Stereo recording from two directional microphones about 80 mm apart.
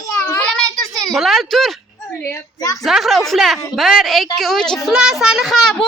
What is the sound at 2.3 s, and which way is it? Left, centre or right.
Speech, left.